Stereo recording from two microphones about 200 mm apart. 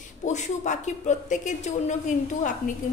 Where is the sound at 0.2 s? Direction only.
35° left (ahead or behind).